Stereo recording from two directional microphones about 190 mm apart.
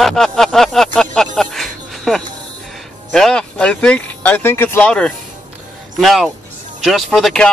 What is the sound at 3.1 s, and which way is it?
Speech, 5° left (ahead or behind).